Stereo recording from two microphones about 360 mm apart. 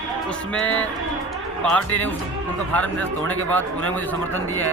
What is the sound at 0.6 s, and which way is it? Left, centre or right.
Speech, centre.